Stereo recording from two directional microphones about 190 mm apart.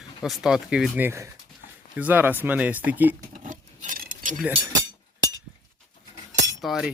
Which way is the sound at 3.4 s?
45° right (ahead or behind).